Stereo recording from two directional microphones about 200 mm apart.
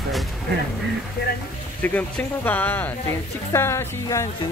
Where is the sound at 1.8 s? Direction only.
10° left (ahead or behind).